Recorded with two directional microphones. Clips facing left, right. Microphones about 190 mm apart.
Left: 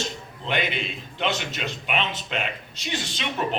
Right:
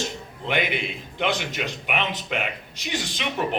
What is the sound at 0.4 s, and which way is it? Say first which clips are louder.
A man's voice: right 2 dB; 15° right (ahead or behind).